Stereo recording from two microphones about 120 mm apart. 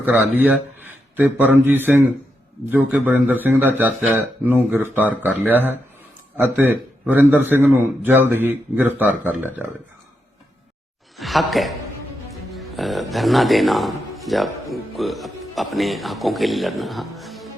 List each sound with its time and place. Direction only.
0.0 s a man's voice: 15° right (ahead or behind)
11.2 s a man's voice: centre (ahead or behind)